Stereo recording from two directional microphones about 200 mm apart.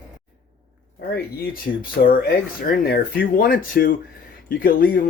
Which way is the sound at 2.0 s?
45° left (ahead or behind).